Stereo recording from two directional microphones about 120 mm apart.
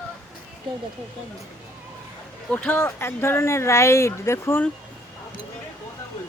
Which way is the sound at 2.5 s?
15° left (ahead or behind).